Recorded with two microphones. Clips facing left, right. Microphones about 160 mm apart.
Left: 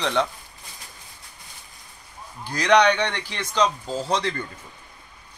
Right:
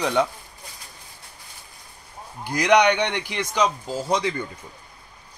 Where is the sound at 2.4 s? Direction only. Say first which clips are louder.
Even; 15° right (ahead or behind).